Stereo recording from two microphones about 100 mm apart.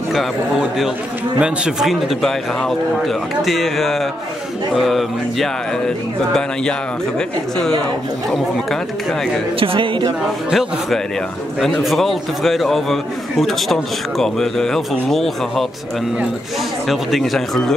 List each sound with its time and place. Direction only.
0.1 s a man's voice: centre (ahead or behind)
9.6 s speech: 60° right (ahead or behind)
10.5 s a man's voice: 5° right (ahead or behind)
16.8 s a man's voice: centre (ahead or behind)